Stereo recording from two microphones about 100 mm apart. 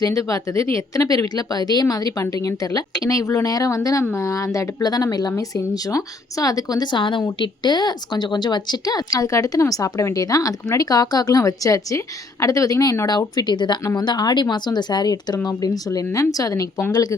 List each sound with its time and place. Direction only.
0.0 s a woman's voice: 35° left (ahead or behind)